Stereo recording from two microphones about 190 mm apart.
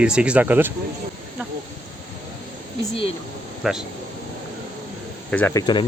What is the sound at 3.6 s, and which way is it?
Speech, 5° right (ahead or behind).